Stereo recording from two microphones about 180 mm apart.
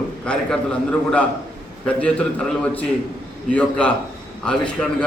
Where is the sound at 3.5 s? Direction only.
5° left (ahead or behind).